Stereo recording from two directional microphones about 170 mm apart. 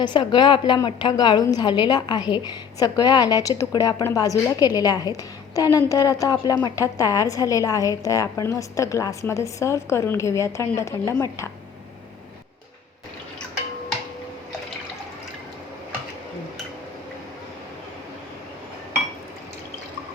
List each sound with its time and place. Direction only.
0.0 s a woman's voice: 25° left (ahead or behind)